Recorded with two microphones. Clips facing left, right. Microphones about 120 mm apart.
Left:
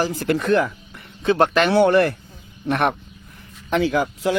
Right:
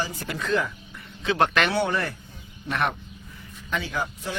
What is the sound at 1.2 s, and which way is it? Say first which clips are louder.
Speech: left 5 dB; 45° left (ahead or behind).